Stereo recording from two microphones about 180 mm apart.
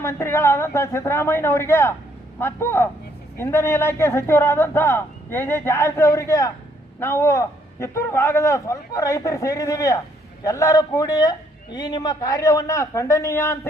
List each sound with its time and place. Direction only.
0.0 s a man's voice: 15° left (ahead or behind)